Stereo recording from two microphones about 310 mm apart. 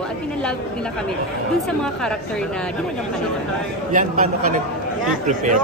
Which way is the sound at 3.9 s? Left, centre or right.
Right.